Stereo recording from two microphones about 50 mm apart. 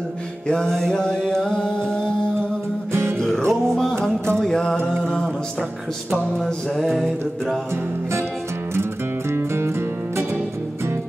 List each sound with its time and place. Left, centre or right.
0.5 s music: centre
2.9 s music: right
3.2 s music: centre
5.0 s a sound: centre
6.3 s mantra: centre
9.3 s music: right